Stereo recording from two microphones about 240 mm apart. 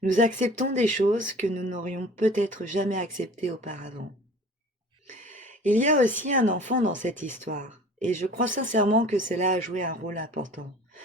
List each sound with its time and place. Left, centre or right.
0.0 s speech: right
5.0 s a sound: right
5.5 s speech: right